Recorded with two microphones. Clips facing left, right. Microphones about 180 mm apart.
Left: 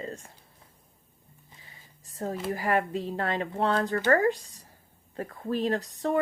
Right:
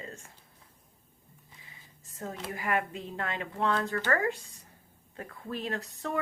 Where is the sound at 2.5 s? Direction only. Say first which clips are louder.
Left 4 dB; 35° left (ahead or behind).